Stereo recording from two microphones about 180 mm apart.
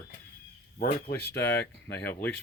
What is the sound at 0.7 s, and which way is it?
Speech, 60° left (ahead or behind).